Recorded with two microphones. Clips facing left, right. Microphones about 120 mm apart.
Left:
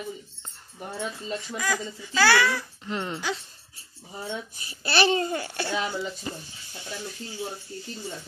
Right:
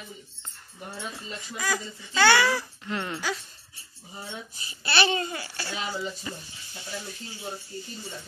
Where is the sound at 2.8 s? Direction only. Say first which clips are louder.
Left 2 dB; 20° left (ahead or behind).